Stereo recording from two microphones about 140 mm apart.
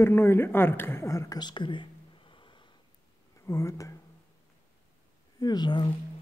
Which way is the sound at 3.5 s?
20° left (ahead or behind).